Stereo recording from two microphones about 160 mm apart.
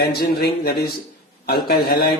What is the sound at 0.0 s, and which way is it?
A man's voice, 75° left (ahead or behind).